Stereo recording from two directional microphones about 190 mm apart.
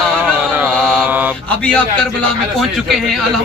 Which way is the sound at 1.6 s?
5° left (ahead or behind).